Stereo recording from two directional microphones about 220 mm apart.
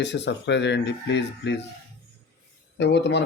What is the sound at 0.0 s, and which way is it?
Speech, 50° left (ahead or behind).